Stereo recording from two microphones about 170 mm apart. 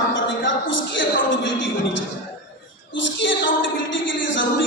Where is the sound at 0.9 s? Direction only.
90° left.